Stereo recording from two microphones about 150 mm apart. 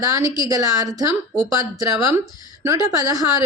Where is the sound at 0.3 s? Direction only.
25° right (ahead or behind).